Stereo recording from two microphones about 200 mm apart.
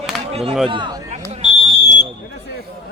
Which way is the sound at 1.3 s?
30° right (ahead or behind).